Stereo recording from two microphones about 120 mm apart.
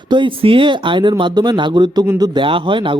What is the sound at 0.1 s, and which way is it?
A man's voice, 45° right (ahead or behind).